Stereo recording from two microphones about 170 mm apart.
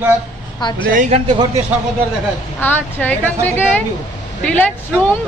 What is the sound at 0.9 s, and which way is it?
Speech, 45° right (ahead or behind).